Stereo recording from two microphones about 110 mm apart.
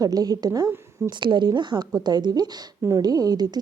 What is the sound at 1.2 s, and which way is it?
A woman's voice, 45° right (ahead or behind).